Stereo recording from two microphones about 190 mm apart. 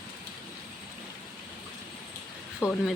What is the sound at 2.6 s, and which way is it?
Speech, 15° left (ahead or behind).